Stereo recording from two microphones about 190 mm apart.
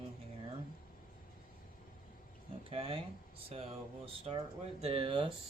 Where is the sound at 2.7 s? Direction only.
30° right (ahead or behind).